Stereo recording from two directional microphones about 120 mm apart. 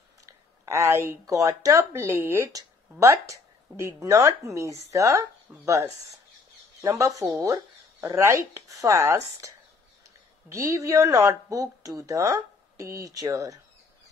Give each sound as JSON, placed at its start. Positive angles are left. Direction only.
{"t": 0.3, "sound": "speech", "side_deg": -25}
{"t": 5.5, "sound": "speech", "side_deg": -15}
{"t": 6.8, "sound": "speech", "side_deg": -25}
{"t": 10.5, "sound": "speech", "side_deg": -25}